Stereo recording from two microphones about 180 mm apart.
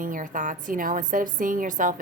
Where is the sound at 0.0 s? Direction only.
50° right (ahead or behind).